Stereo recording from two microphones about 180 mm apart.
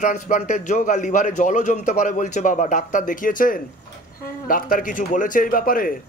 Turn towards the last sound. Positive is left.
turn(degrees=50)  # may be behind; listen again after turning